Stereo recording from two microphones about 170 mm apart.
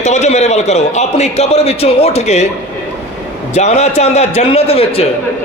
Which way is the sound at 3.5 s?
40° left (ahead or behind).